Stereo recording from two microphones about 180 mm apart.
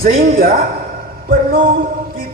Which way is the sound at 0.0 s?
55° right (ahead or behind).